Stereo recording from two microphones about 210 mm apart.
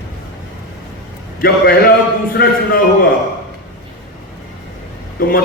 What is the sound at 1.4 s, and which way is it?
A man's voice, 45° left (ahead or behind).